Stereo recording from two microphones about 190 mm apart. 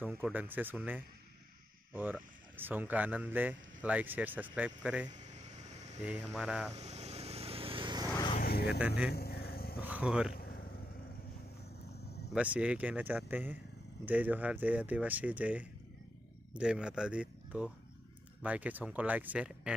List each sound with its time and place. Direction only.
0.0 s speech: 10° right (ahead or behind)
5.1 s a sound: 40° right (ahead or behind)
6.3 s speech: 5° right (ahead or behind)
6.7 s vehicle: 35° right (ahead or behind)
8.1 s vehicle: 20° left (ahead or behind)
8.4 s vehicle: 55° left (ahead or behind)
8.7 s speech: 5° right (ahead or behind)
9.1 s vehicle: 55° left (ahead or behind)
9.8 s speech: 10° right (ahead or behind)
10.3 s vehicle: 50° left (ahead or behind)
12.4 s speech: 5° right (ahead or behind)